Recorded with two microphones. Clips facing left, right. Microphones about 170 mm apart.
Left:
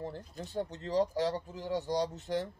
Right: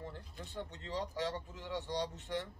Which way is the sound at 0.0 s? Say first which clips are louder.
Left 7 dB; 40° left (ahead or behind).